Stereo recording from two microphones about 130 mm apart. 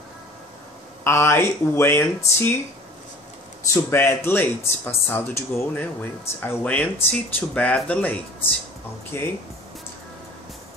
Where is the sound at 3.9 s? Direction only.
15° left (ahead or behind).